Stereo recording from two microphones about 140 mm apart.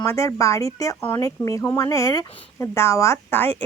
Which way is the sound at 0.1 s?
20° left (ahead or behind).